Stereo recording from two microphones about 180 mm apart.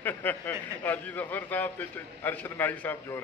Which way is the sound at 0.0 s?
10° left (ahead or behind).